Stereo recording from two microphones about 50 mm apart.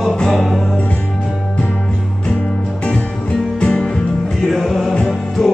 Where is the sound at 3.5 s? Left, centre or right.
Centre.